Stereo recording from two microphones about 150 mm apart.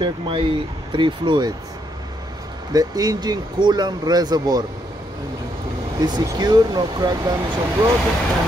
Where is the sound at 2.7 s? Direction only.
25° right (ahead or behind).